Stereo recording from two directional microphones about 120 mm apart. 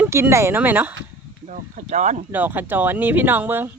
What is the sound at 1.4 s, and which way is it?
Speech, 90° right.